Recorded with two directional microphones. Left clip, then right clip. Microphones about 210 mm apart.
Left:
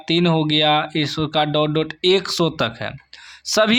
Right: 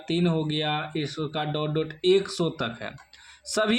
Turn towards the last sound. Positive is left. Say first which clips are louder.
# left 8 dB
turn(degrees=30)  # may be behind; listen again after turning